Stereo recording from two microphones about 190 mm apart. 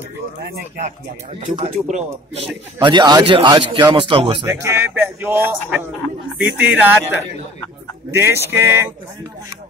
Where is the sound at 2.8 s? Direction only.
20° right (ahead or behind).